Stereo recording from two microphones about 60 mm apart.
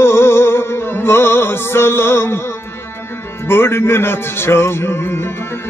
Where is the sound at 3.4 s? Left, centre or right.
Left.